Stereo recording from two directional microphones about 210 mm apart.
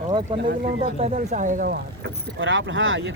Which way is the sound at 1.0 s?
35° right (ahead or behind).